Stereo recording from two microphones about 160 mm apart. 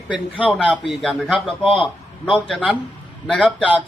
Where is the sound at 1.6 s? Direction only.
35° left (ahead or behind).